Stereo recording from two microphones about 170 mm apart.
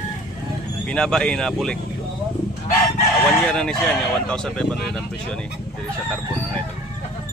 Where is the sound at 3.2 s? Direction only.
5° left (ahead or behind).